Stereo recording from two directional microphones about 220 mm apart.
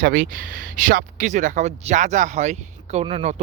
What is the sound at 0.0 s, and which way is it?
Speech, 40° right (ahead or behind).